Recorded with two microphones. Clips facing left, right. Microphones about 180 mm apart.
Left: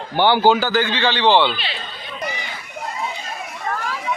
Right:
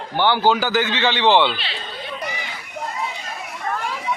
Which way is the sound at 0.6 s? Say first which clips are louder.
Left 1 dB; 20° right (ahead or behind).